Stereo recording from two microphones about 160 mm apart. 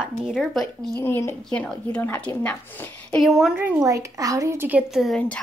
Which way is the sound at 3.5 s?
15° right (ahead or behind).